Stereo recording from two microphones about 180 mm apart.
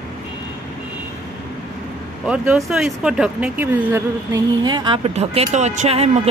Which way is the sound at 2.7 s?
5° right (ahead or behind).